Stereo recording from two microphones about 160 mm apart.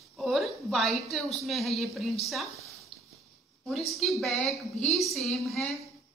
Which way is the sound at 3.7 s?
Centre (ahead or behind).